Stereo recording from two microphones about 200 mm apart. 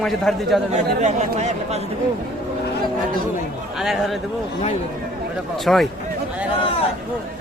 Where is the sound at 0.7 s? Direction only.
35° right (ahead or behind).